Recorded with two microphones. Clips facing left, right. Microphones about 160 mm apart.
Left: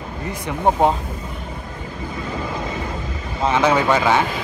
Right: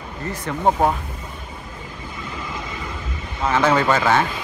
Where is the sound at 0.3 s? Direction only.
15° left (ahead or behind).